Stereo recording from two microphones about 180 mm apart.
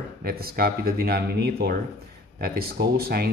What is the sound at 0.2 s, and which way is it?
Speech, 55° right (ahead or behind).